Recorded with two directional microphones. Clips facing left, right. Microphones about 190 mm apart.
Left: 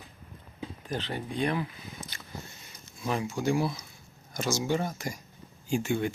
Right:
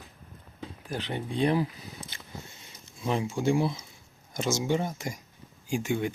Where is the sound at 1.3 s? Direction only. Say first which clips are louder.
Right 5 dB; 30° right (ahead or behind).